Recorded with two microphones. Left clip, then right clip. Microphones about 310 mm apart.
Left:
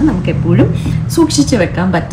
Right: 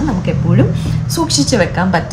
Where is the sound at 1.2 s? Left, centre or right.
Right.